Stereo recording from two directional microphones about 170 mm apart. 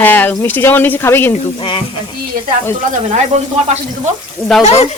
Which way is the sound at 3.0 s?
40° right (ahead or behind).